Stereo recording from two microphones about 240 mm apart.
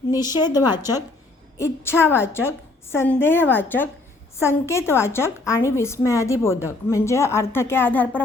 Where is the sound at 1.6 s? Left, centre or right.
Centre.